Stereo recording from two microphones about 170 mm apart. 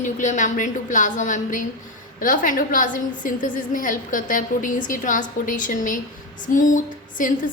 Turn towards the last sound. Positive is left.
turn(degrees=50)  # may be behind; listen again after turning